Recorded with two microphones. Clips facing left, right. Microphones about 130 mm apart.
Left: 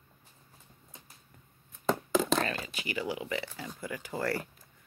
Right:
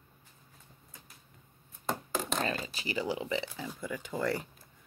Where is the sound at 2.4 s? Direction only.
30° right (ahead or behind).